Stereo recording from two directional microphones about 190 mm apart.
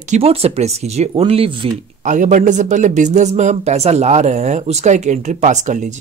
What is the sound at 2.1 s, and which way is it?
Speech, 40° right (ahead or behind).